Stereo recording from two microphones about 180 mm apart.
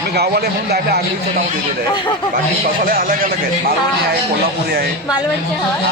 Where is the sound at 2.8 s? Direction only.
50° right (ahead or behind).